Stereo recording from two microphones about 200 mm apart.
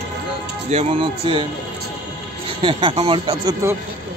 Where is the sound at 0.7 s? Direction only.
25° right (ahead or behind).